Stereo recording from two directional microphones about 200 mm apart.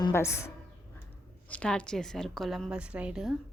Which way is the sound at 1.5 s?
5° left (ahead or behind).